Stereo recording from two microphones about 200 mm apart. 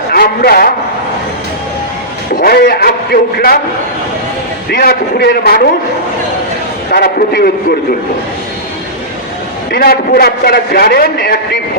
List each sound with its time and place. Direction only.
0.1 s a man's voice: 50° left (ahead or behind)
2.4 s a man's voice: 50° left (ahead or behind)
4.7 s a man's voice: 50° left (ahead or behind)
6.9 s a man's voice: 50° left (ahead or behind)
9.7 s a man's voice: 50° left (ahead or behind)